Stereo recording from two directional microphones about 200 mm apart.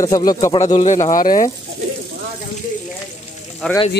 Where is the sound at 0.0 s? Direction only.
20° left (ahead or behind).